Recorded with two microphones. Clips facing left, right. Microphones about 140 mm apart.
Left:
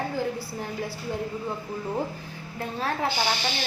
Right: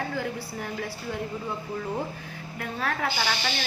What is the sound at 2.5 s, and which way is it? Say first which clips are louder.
Speech: left 1 dB; 25° left (ahead or behind).